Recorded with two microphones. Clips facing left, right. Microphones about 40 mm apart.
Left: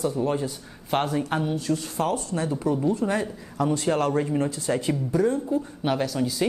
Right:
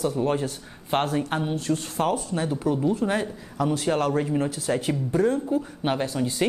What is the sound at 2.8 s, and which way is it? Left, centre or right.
Speech, centre.